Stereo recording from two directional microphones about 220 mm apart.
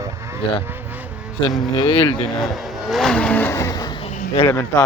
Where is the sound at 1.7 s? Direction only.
20° left (ahead or behind).